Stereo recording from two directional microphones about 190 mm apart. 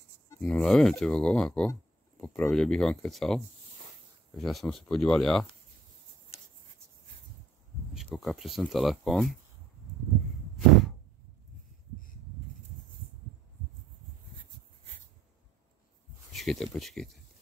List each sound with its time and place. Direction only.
0.4 s speech: centre (ahead or behind)
7.9 s speech: centre (ahead or behind)
16.3 s speech: centre (ahead or behind)